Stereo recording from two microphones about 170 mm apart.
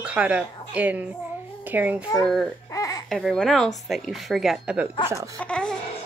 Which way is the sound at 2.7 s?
20° left (ahead or behind).